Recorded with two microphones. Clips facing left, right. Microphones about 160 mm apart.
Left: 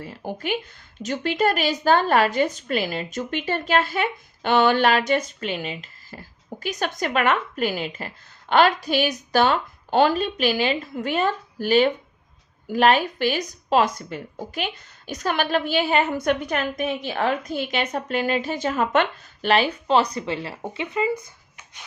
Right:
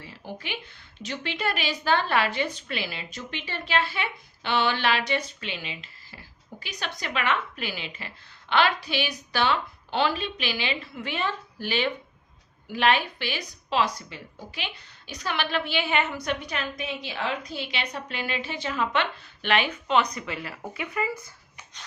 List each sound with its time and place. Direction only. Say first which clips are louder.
0.0 s a woman's voice: left 8 dB; 50° left (ahead or behind); by 21.2 s 20° left (ahead or behind)